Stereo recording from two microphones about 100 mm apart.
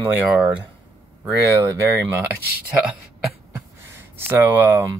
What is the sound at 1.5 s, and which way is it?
Speech, 30° right (ahead or behind).